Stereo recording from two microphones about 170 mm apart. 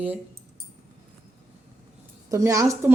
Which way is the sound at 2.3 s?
20° right (ahead or behind).